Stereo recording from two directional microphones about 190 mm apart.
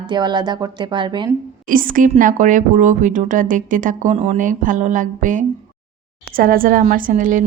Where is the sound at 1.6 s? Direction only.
45° right (ahead or behind).